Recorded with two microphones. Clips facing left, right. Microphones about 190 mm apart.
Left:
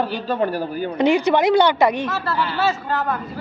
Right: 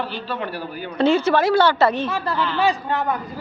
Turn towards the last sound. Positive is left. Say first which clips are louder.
# right 1 dB
turn(degrees=-15)  # may be behind; listen again after turning